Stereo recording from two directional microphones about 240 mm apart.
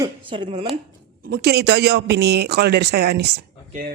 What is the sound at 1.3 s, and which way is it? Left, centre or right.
Speech, right.